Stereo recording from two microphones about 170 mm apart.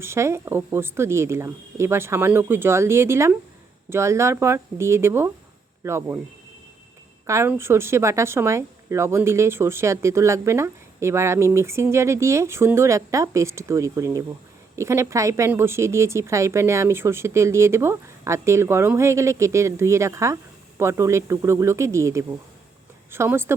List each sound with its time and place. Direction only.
0.0 s a woman's voice: 15° right (ahead or behind)
7.3 s a woman's voice: 15° right (ahead or behind)